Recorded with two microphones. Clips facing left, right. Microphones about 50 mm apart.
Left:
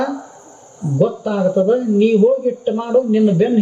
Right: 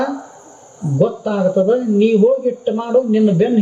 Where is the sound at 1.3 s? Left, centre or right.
Centre.